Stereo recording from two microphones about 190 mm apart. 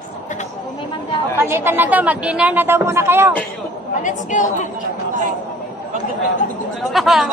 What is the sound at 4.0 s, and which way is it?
Speech, 40° left (ahead or behind).